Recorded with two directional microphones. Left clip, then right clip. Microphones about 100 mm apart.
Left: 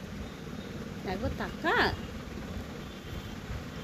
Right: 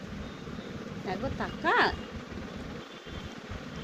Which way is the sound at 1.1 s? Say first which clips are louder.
Right 1 dB; 35° left (ahead or behind).